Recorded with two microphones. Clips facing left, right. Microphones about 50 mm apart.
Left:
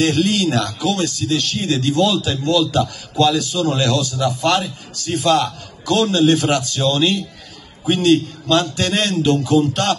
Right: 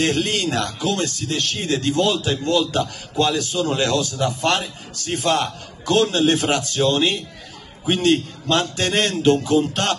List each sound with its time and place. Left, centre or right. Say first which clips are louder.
0.0 s a man's voice: left 4 dB; right